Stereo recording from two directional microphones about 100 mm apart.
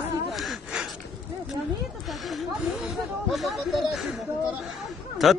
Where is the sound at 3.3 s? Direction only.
Centre (ahead or behind).